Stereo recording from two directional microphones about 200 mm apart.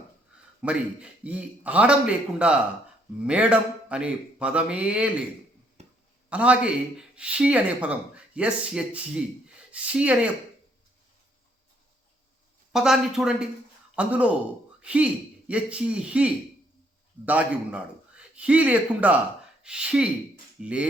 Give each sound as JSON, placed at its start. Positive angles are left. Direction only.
{"t": 0.6, "sound": "a man's voice", "side_deg": -5}
{"t": 5.8, "sound": "a sound", "side_deg": -35}
{"t": 6.3, "sound": "speech", "side_deg": -5}
{"t": 12.7, "sound": "a man's voice", "side_deg": 0}